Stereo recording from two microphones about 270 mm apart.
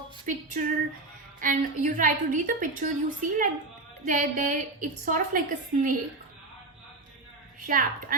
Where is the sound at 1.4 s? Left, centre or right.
Right.